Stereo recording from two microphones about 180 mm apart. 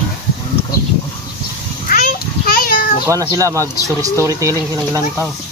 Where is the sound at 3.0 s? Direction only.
20° right (ahead or behind).